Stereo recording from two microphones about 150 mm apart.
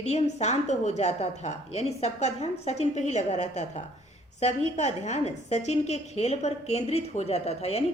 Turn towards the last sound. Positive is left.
turn(degrees=45)  # may be behind; listen again after turning